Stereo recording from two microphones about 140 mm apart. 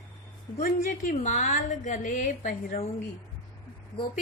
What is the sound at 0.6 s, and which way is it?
A woman's voice, 65° left (ahead or behind).